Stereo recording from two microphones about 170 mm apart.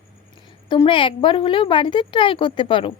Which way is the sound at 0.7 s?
30° left (ahead or behind).